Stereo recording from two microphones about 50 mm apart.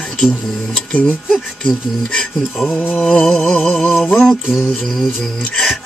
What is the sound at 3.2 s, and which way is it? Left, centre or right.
Speech, centre.